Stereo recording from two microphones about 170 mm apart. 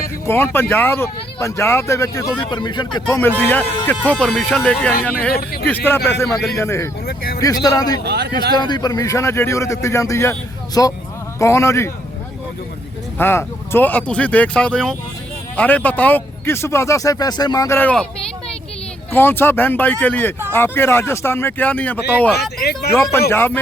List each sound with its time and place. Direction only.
0.3 s speech: 15° left (ahead or behind)
3.2 s speech: 10° left (ahead or behind)
6.2 s speech: centre (ahead or behind)
6.6 s speech: 15° left (ahead or behind)
8.0 s a man's voice: 75° right (ahead or behind)
8.5 s speech: 25° left (ahead or behind)
13.1 s speech: 15° left (ahead or behind)
19.1 s speech: 10° left (ahead or behind)